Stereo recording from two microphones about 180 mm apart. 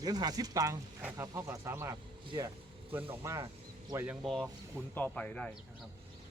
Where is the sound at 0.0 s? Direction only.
20° right (ahead or behind).